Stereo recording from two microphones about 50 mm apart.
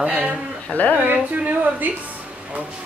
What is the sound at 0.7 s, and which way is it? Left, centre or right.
Speech, left.